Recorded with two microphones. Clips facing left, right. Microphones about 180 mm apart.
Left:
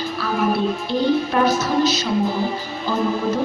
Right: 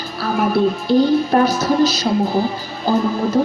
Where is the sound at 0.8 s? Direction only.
35° right (ahead or behind).